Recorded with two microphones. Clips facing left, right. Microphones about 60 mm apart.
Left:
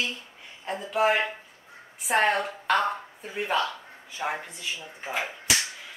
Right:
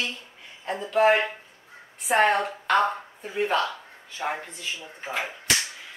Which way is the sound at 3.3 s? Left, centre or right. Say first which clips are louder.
Right 2 dB; centre.